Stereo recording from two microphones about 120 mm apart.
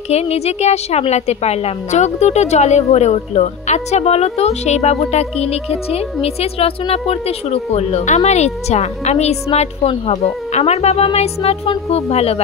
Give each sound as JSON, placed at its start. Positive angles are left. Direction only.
{"t": 0.1, "sound": "a woman's voice", "side_deg": 60}